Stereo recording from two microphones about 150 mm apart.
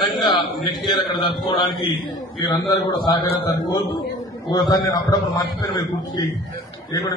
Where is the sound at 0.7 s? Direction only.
30° left (ahead or behind).